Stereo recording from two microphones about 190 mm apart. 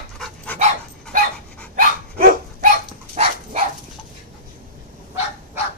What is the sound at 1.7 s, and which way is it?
Dog, 50° right (ahead or behind).